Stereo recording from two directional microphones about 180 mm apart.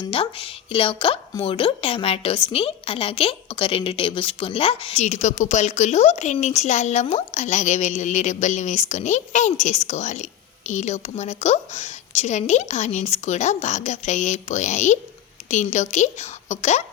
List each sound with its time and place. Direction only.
0.1 s a woman's voice: 30° left (ahead or behind)